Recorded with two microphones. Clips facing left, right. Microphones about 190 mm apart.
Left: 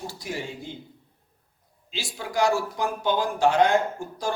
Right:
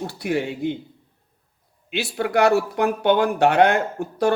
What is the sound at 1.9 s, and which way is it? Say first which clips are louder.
Speech: right 8 dB; 65° right (ahead or behind).